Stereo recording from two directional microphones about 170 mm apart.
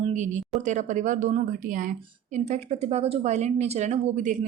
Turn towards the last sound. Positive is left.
turn(degrees=-45)  # may be behind; listen again after turning